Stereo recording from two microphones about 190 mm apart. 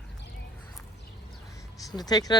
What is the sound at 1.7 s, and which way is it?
Speech, 20° left (ahead or behind).